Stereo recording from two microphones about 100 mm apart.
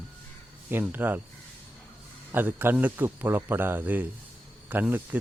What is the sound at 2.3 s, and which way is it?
Speech, 20° right (ahead or behind).